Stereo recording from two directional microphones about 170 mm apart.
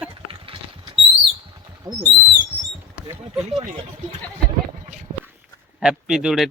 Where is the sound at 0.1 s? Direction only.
30° right (ahead or behind).